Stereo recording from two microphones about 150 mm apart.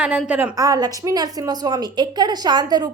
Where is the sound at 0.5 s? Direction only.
25° right (ahead or behind).